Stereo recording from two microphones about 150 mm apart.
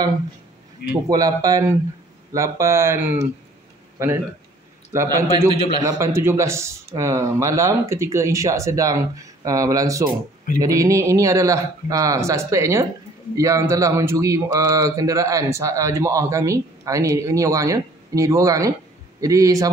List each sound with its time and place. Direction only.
1.0 s a man's voice: 25° right (ahead or behind)